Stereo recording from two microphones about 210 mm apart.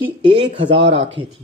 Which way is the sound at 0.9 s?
60° right (ahead or behind).